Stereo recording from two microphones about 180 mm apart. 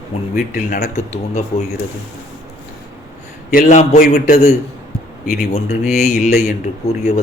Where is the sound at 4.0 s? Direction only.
55° left (ahead or behind).